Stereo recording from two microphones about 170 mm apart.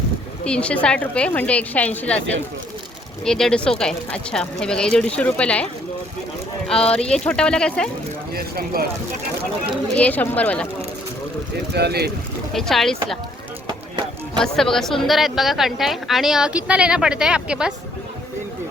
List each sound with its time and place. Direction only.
0.4 s a woman's voice: 5° left (ahead or behind)
3.2 s a woman's voice: 5° left (ahead or behind)
6.9 s a woman's voice: 5° left (ahead or behind)
8.3 s speech: 65° right (ahead or behind)
9.9 s a woman's voice: 10° left (ahead or behind)
11.7 s speech: 75° right (ahead or behind)
12.5 s a woman's voice: centre (ahead or behind)
14.3 s a woman's voice: 5° left (ahead or behind)